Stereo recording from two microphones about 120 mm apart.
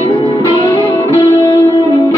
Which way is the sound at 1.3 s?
25° left (ahead or behind).